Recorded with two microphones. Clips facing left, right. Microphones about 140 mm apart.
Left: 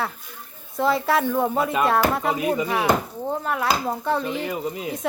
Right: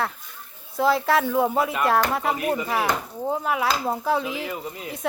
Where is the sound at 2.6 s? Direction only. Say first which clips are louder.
Left 3 dB; centre (ahead or behind).